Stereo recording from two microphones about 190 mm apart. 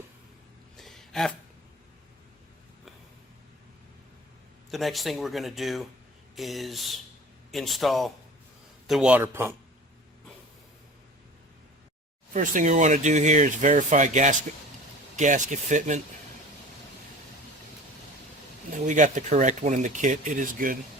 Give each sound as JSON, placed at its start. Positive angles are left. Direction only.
{"t": 0.8, "sound": "a sound", "side_deg": 0}
{"t": 4.7, "sound": "a man's voice", "side_deg": 0}
{"t": 12.3, "sound": "speech", "side_deg": -45}
{"t": 18.7, "sound": "speech", "side_deg": -40}